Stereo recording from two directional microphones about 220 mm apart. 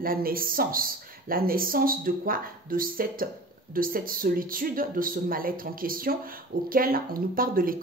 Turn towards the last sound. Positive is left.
turn(degrees=-40)  # may be behind; listen again after turning